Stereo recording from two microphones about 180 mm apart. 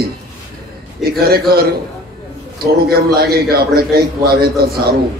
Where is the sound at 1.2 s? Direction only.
55° right (ahead or behind).